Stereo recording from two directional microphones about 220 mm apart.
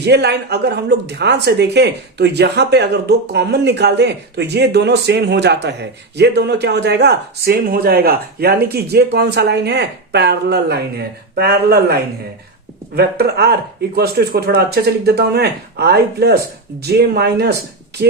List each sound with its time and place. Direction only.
0.0 s speech: 50° right (ahead or behind)
13.0 s speech: 45° right (ahead or behind)